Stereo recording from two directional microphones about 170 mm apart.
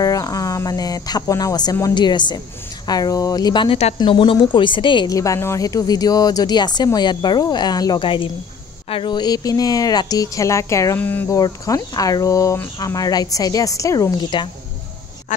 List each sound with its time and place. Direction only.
0.0 s speech: 20° left (ahead or behind)